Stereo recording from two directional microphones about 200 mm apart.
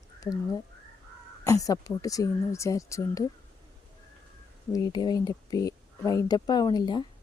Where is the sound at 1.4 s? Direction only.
15° left (ahead or behind).